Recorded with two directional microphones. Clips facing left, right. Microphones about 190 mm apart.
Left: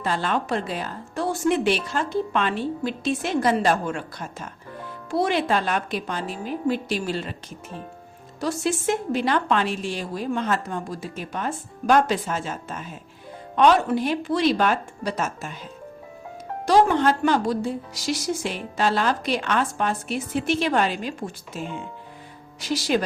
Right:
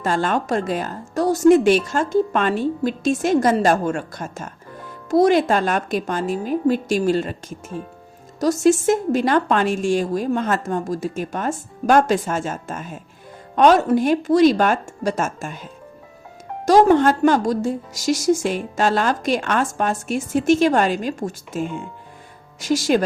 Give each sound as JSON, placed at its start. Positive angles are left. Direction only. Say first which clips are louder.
{"t": 0.0, "sound": "a woman's voice", "louder": "right 4 dB", "side_deg": -45}
{"t": 16.6, "sound": "a woman's voice", "louder": "right 5 dB", "side_deg": -45}